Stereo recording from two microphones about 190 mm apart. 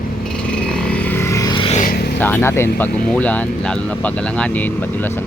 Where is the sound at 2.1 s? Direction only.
10° left (ahead or behind).